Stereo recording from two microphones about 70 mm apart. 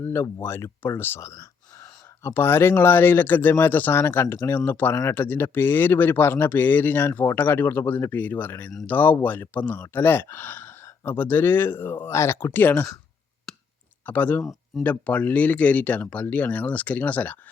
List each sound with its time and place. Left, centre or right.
0.0 s speech: left
1.2 s a sound: left
2.2 s speech: left
12.5 s speech: left
14.1 s speech: left